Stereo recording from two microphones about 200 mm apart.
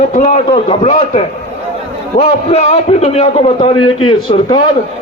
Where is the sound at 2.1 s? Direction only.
35° left (ahead or behind).